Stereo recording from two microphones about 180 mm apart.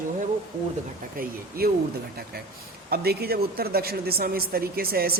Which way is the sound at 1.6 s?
55° right (ahead or behind).